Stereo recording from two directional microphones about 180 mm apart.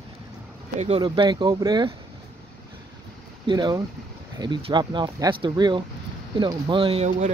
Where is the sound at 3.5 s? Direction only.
25° right (ahead or behind).